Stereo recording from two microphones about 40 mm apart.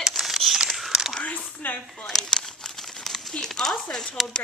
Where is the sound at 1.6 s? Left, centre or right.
Left.